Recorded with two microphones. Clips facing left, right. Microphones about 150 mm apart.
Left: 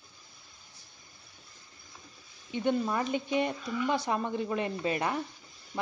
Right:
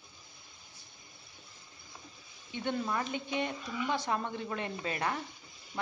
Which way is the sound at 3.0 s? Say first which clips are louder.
Left 5 dB; 35° left (ahead or behind).